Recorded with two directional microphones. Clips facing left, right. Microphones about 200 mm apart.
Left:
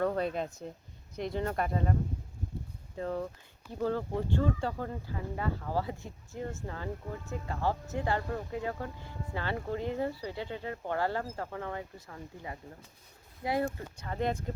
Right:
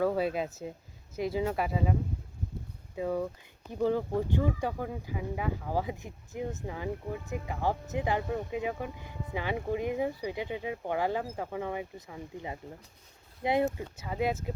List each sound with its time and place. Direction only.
0.0 s speech: 5° right (ahead or behind); by 13.7 s 20° right (ahead or behind)
13.7 s speech: 5° right (ahead or behind)